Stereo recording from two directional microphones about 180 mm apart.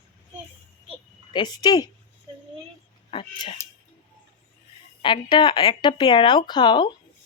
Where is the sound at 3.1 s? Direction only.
30° left (ahead or behind).